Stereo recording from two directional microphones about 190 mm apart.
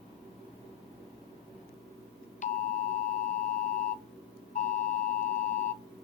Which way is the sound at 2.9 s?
40° left (ahead or behind).